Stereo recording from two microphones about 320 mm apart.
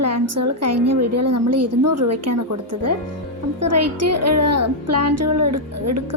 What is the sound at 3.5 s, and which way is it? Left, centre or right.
Speech, right.